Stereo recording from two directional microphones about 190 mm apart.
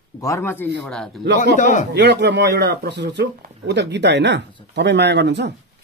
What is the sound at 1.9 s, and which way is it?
Speech, 65° right (ahead or behind).